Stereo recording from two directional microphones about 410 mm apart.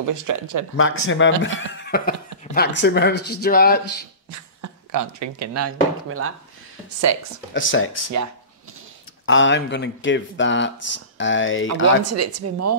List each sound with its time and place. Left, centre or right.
0.0 s speech: right
0.7 s speech: left
4.6 s speech: right
7.5 s speech: left
9.2 s speech: left
12.0 s a woman's voice: right